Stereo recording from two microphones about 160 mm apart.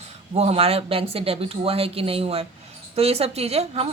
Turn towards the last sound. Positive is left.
turn(degrees=-40)  # may be behind; listen again after turning